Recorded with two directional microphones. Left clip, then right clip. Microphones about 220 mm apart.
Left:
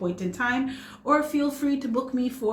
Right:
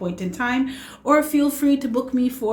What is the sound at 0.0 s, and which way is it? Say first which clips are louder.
A woman's voice: right 2 dB; 30° right (ahead or behind).